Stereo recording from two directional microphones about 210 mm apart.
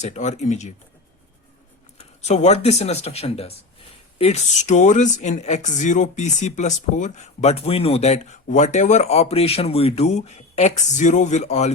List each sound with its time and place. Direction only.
0.0 s speech: 35° left (ahead or behind)
2.0 s speech: 30° left (ahead or behind)